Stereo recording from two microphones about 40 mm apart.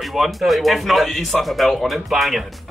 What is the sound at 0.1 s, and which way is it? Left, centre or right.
A man's voice, centre.